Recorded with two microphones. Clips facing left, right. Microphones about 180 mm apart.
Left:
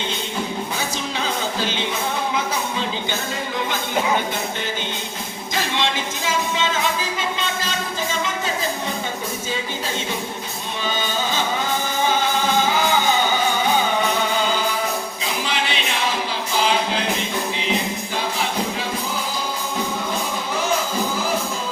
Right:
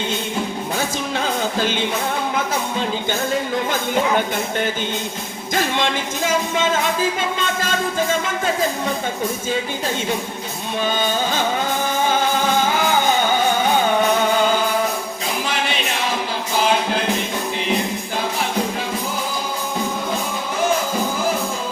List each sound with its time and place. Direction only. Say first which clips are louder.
5.5 s music: right 3 dB; 50° right (ahead or behind)
10.8 s music: right 3 dB; 50° right (ahead or behind)